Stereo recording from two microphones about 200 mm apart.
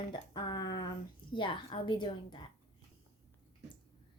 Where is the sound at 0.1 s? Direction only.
20° left (ahead or behind).